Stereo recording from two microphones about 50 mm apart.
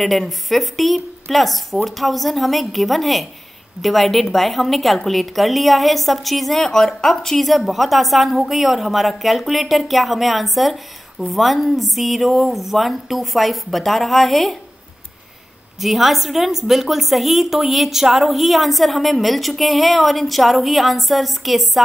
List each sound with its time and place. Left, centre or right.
0.0 s a woman's voice: centre
15.8 s a woman's voice: centre